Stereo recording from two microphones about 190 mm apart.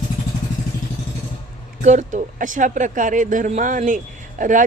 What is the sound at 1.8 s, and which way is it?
Speech, 40° right (ahead or behind).